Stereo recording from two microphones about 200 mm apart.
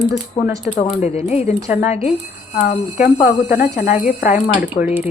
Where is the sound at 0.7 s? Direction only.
30° left (ahead or behind).